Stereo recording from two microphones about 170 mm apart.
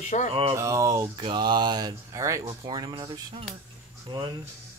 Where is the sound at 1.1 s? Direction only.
30° right (ahead or behind).